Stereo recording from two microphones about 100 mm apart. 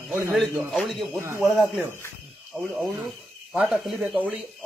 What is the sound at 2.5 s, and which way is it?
Speech, 15° right (ahead or behind).